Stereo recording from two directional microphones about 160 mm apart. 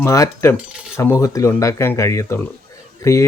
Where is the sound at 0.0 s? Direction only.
20° left (ahead or behind).